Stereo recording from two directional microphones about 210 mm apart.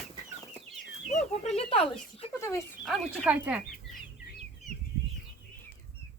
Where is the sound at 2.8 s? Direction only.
Centre (ahead or behind).